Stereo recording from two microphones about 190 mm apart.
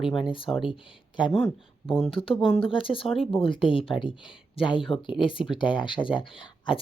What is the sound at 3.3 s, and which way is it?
Speech, 30° left (ahead or behind).